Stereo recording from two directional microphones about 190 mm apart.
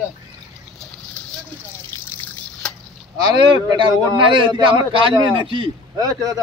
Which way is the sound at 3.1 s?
20° right (ahead or behind).